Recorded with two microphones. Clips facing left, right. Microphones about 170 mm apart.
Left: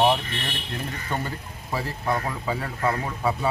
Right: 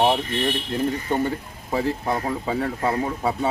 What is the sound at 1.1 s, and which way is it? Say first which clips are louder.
Speech: right 7 dB; 20° right (ahead or behind).